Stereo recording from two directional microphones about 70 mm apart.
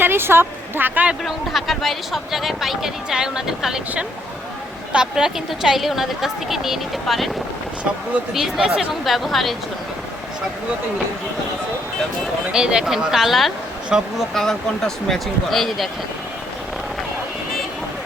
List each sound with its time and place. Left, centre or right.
0.0 s speech: right
1.2 s speech: centre
4.9 s speech: centre
8.3 s speech: centre
12.5 s speech: centre
14.3 s speech: centre